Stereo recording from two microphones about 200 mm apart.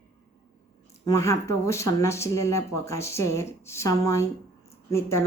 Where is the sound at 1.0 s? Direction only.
15° left (ahead or behind).